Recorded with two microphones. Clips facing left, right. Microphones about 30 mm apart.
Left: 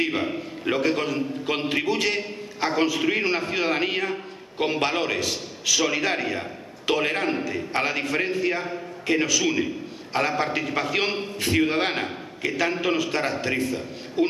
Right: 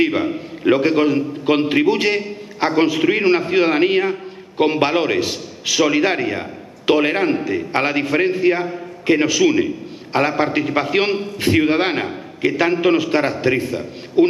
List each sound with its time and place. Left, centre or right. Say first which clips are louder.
0.0 s a man's voice: right 7 dB; right